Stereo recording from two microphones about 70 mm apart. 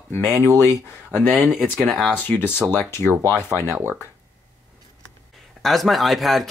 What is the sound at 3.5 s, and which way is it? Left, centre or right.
Speech, right.